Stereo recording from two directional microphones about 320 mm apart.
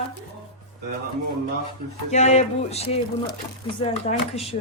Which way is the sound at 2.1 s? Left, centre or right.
Left.